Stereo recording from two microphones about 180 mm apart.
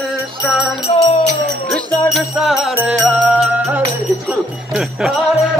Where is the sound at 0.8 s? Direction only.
35° left (ahead or behind).